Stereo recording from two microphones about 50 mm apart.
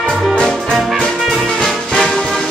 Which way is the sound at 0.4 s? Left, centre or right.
Centre.